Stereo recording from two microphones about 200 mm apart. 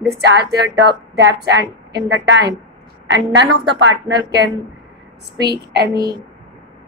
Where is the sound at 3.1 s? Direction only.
65° right (ahead or behind).